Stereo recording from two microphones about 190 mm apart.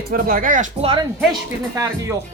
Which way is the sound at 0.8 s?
25° right (ahead or behind).